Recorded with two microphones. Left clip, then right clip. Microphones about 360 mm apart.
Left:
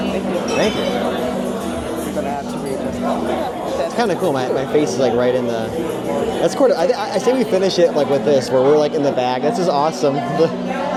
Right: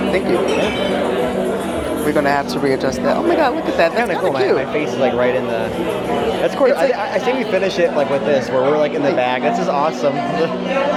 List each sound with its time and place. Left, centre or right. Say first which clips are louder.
4.9 s speech: right 4 dB; left
7.3 s speech: left 4 dB; left